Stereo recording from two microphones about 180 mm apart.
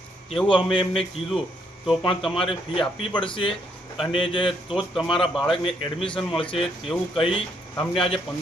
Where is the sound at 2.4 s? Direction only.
30° left (ahead or behind).